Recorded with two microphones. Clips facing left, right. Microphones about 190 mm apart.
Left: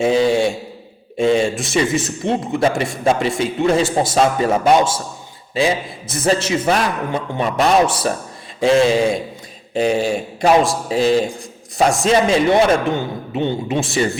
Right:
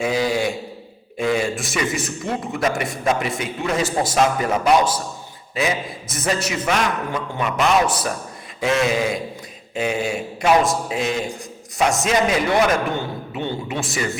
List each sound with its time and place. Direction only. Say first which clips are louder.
0.0 s a man's voice: left 6 dB; 25° left (ahead or behind)